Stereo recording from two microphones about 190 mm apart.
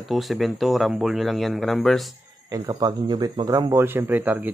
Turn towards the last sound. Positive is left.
turn(degrees=-10)  # may be behind; listen again after turning